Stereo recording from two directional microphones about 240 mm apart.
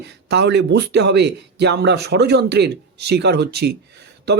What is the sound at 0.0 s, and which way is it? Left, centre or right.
Speech, right.